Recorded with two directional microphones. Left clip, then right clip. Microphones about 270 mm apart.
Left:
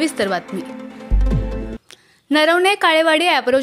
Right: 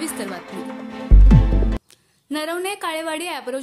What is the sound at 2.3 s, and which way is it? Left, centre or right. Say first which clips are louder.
A woman's voice: left 11 dB; right.